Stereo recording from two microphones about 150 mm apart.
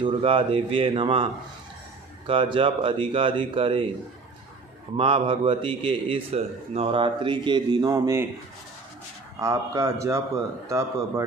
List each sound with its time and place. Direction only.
0.0 s a man's voice: 35° right (ahead or behind)
4.9 s a man's voice: 35° right (ahead or behind); by 8.3 s 20° right (ahead or behind)
9.4 s a man's voice: 20° right (ahead or behind)